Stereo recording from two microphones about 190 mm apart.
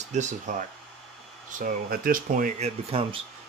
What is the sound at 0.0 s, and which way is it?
Speech, 40° right (ahead or behind).